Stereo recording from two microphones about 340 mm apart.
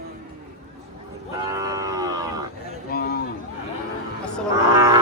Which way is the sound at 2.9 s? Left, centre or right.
Left.